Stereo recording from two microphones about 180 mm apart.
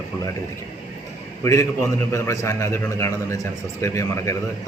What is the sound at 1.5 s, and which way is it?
A man's voice, 15° left (ahead or behind).